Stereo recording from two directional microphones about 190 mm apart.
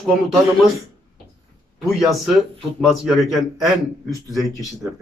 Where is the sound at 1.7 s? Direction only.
Centre (ahead or behind).